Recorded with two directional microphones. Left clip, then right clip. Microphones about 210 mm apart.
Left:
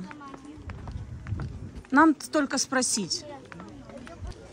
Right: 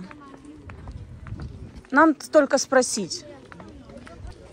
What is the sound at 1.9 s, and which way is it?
Speech, 10° left (ahead or behind).